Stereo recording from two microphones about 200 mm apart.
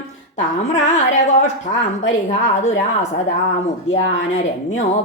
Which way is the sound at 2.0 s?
35° left (ahead or behind).